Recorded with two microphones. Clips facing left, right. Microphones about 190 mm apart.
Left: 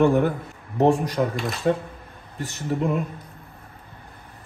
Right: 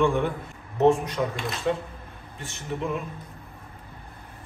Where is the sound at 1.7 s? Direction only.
50° left (ahead or behind).